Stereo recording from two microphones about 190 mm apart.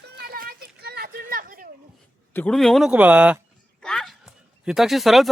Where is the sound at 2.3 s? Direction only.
5° left (ahead or behind).